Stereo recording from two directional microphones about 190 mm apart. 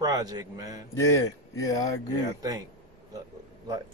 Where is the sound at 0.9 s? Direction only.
15° left (ahead or behind).